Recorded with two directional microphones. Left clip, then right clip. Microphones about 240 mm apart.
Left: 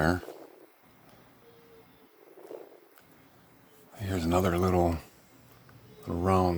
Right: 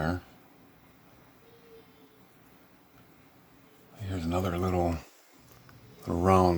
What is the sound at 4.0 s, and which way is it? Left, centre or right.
Speech, left.